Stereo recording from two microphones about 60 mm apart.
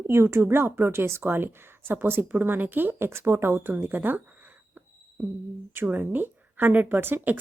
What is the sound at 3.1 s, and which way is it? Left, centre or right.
A woman's voice, right.